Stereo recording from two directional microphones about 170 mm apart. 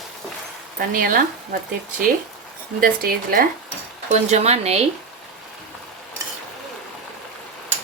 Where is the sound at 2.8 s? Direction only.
60° right (ahead or behind).